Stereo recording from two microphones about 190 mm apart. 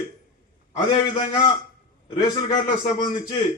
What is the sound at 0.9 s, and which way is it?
A man's voice, 25° left (ahead or behind).